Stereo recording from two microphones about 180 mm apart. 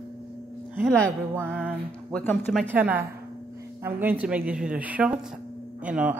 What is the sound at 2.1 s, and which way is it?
Speech, 5° left (ahead or behind).